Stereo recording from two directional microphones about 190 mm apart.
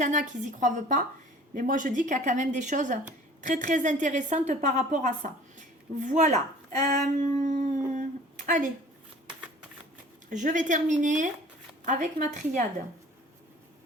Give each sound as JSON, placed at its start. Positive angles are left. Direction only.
{"t": 0.0, "sound": "a woman's voice", "side_deg": -40}
{"t": 10.2, "sound": "a woman's voice", "side_deg": -40}